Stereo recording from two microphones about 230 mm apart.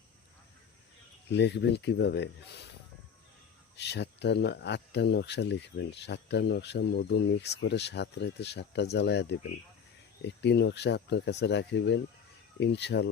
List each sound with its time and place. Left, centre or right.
1.3 s speech: left
3.8 s speech: left
10.2 s speech: left